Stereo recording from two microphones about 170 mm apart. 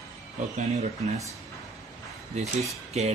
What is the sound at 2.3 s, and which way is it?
Speech, 40° right (ahead or behind).